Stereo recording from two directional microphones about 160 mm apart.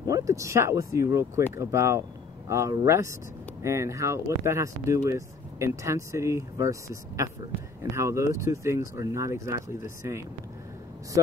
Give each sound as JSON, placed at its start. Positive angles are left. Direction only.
{"t": 0.0, "sound": "speech", "side_deg": -20}